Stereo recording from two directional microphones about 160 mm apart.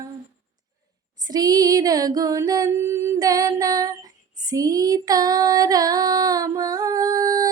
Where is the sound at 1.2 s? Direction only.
25° right (ahead or behind).